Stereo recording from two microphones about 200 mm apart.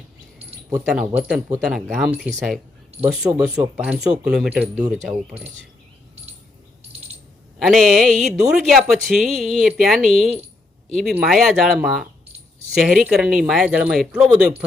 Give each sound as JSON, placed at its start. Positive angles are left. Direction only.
{"t": 0.9, "sound": "speech", "side_deg": -5}
{"t": 7.6, "sound": "speech", "side_deg": 0}